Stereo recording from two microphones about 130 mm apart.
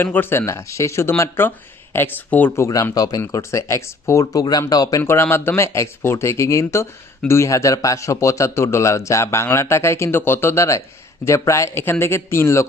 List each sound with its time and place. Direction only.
0.0 s speech: 15° left (ahead or behind)
2.6 s speech: 25° left (ahead or behind)